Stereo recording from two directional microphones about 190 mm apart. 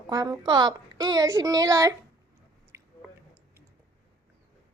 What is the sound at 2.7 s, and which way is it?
Chewing, 15° right (ahead or behind).